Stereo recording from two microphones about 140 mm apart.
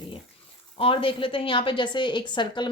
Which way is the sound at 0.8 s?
40° left (ahead or behind).